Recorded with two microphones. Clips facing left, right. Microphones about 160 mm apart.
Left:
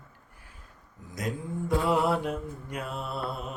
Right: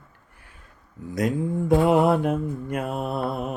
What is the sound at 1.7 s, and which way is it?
Mantra, 60° right (ahead or behind).